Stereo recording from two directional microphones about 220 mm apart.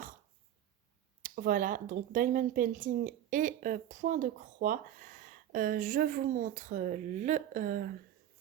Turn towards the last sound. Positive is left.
turn(degrees=-40)  # may be behind; listen again after turning